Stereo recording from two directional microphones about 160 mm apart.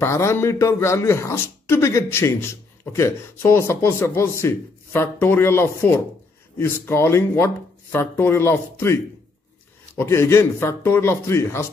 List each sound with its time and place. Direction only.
0.0 s speech: 15° left (ahead or behind)